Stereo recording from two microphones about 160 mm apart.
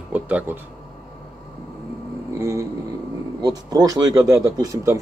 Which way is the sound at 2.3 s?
20° right (ahead or behind).